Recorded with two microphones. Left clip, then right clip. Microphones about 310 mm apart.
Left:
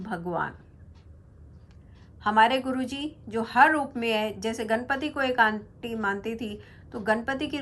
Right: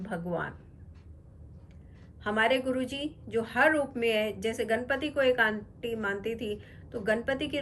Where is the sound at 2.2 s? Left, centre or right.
Centre.